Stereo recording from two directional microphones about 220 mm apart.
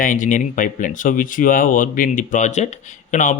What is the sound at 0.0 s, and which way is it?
Speech, 35° left (ahead or behind).